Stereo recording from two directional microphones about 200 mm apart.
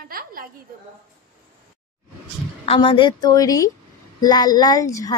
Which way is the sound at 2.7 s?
25° left (ahead or behind).